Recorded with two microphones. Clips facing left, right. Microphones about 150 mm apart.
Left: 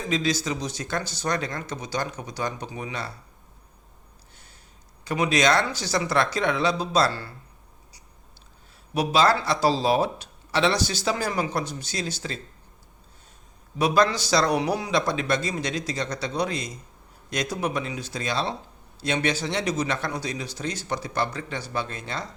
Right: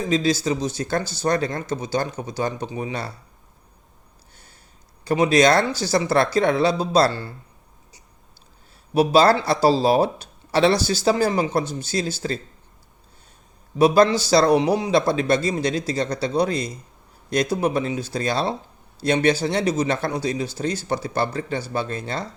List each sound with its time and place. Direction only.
0.1 s speech: 30° right (ahead or behind)
5.0 s speech: 35° right (ahead or behind)
9.0 s speech: 35° right (ahead or behind)
13.7 s speech: 30° right (ahead or behind)